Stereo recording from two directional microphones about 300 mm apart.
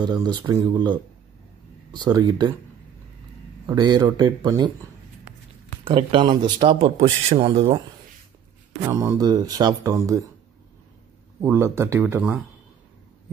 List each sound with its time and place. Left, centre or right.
0.0 s speech: centre
3.6 s speech: centre
5.9 s speech: centre
8.8 s speech: centre
11.4 s speech: centre